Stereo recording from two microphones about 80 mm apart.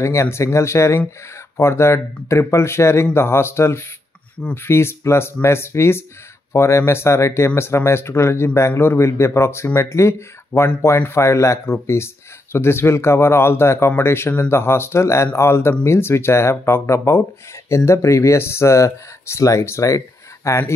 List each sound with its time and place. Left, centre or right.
0.0 s speech: left